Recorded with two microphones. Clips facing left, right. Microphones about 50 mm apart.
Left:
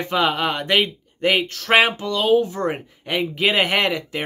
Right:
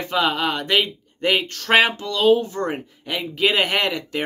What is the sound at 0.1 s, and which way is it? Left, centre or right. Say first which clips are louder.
Speech: even; left.